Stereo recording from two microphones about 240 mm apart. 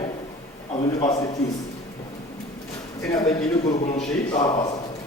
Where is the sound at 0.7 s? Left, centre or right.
Left.